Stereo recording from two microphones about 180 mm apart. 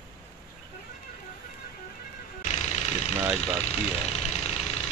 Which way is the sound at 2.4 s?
35° left (ahead or behind).